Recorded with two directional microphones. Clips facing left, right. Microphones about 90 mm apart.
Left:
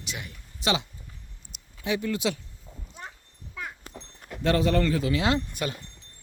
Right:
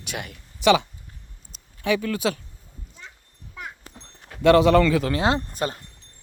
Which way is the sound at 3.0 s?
50° left (ahead or behind).